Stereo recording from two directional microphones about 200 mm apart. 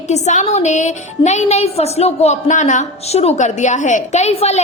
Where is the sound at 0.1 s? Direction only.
35° left (ahead or behind).